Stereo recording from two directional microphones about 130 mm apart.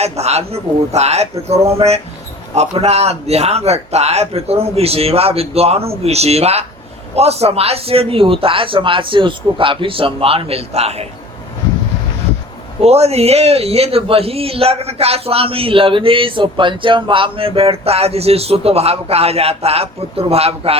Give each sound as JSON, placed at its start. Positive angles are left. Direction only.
{"t": 0.0, "sound": "a man's voice", "side_deg": -55}
{"t": 12.8, "sound": "a man's voice", "side_deg": -55}